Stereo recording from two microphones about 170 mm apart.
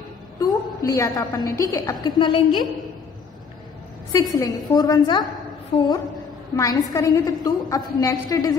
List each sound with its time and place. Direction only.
0.4 s a sound: 20° left (ahead or behind)
1.6 s a woman's voice: 20° left (ahead or behind)
4.1 s a woman's voice: 20° left (ahead or behind)
5.7 s a woman's voice: 35° left (ahead or behind)
6.5 s a woman's voice: 20° left (ahead or behind)